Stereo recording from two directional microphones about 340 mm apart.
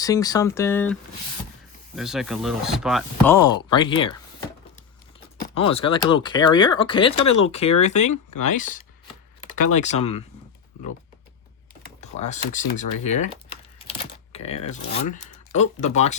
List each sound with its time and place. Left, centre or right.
0.0 s speech: centre
2.0 s speech: centre
7.2 s speech: left
7.8 s speech: centre
8.0 s speech: left
9.7 s speech: left
11.9 s speech: centre
14.3 s speech: centre